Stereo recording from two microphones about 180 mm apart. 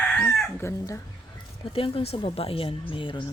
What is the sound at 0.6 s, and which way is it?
Crowing, 15° left (ahead or behind).